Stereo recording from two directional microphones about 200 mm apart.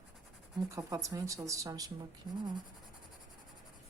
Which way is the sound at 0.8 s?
15° right (ahead or behind).